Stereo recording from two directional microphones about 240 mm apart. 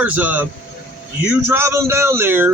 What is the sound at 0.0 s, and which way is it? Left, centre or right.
A man's voice, centre.